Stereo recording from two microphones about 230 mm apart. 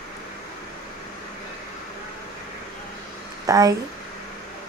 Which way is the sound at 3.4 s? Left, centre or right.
Centre.